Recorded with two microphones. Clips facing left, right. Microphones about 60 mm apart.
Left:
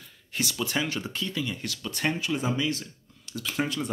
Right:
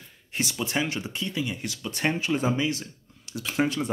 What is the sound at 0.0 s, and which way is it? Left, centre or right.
Speech, right.